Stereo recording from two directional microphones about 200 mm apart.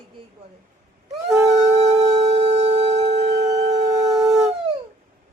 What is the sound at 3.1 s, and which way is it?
Shofar, 60° right (ahead or behind).